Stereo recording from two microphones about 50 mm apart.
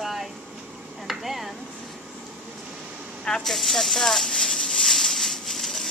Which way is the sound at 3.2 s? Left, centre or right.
Centre.